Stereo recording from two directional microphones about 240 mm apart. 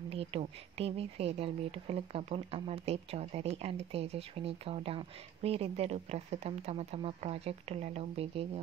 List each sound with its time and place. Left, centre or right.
0.1 s speech: right